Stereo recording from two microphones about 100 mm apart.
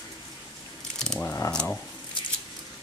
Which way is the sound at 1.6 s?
10° left (ahead or behind).